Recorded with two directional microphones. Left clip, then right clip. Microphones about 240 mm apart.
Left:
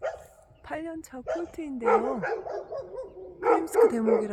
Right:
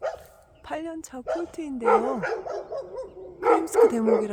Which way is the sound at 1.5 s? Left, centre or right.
Centre.